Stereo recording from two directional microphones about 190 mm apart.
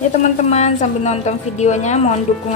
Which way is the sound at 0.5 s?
35° left (ahead or behind).